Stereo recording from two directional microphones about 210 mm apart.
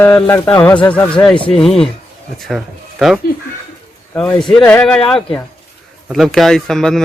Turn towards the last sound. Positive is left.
turn(degrees=0)  # may be behind; listen again after turning